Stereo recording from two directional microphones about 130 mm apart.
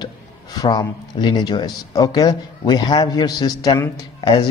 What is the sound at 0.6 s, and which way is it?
Speech, 35° left (ahead or behind).